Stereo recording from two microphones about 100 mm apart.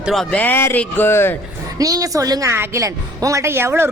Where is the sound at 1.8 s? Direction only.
35° right (ahead or behind).